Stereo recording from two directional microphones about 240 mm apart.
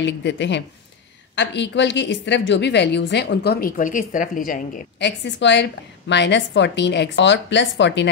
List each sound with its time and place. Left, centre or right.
0.0 s a woman's voice: left